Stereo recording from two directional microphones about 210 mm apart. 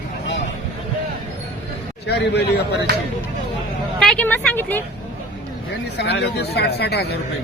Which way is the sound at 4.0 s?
5° left (ahead or behind).